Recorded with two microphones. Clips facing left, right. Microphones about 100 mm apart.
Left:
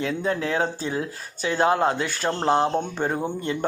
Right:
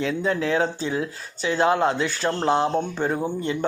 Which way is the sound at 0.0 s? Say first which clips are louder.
Right 2 dB; 45° left (ahead or behind).